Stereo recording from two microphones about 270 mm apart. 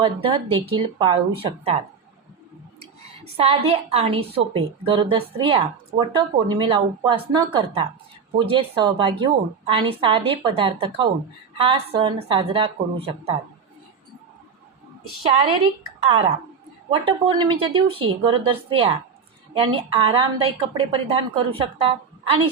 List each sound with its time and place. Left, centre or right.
0.0 s a woman's voice: centre
3.3 s a woman's voice: right
16.0 s a woman's voice: centre